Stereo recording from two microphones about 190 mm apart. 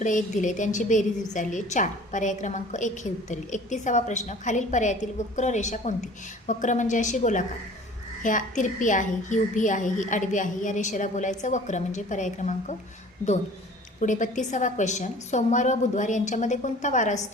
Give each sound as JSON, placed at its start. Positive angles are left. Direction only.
{"t": 0.0, "sound": "a woman's voice", "side_deg": 40}
{"t": 14.0, "sound": "a woman's voice", "side_deg": 40}